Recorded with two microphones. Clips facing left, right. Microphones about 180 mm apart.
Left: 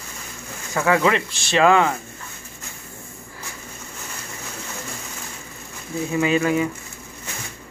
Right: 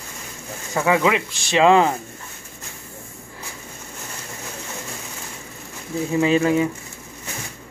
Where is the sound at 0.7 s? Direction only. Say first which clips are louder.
Even; 15° right (ahead or behind).